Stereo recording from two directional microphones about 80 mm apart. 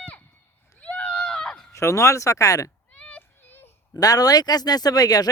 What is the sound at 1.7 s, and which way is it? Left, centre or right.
Speech, left.